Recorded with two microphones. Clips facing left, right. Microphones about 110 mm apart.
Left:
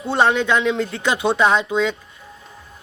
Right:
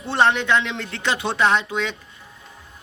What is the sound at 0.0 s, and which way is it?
A man's voice, 15° left (ahead or behind).